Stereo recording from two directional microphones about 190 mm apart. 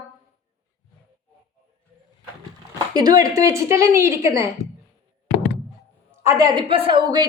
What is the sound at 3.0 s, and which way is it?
Speech, 20° right (ahead or behind).